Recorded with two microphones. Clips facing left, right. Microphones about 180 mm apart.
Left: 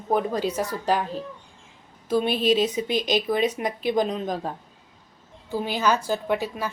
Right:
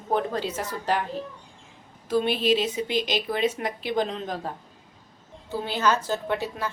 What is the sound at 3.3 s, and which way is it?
Speech, 15° left (ahead or behind).